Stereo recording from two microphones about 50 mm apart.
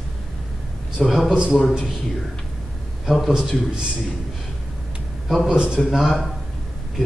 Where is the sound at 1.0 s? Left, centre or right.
Centre.